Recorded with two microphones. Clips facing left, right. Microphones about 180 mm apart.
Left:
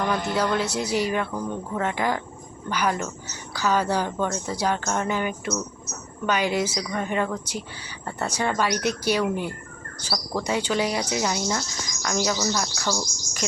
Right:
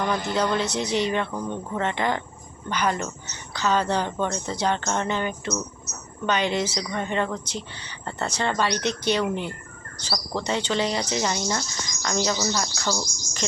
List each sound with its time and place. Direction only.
0.0 s insect: 5° left (ahead or behind)
0.5 s speech: 5° left (ahead or behind)
12.0 s insect: 5° left (ahead or behind)